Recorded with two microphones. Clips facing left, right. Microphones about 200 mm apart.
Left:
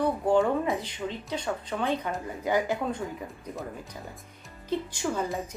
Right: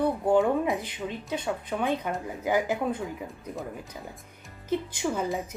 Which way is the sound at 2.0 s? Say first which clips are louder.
Right 1 dB; centre (ahead or behind).